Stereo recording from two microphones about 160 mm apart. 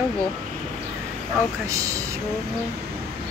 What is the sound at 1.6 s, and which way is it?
Speech, 20° right (ahead or behind).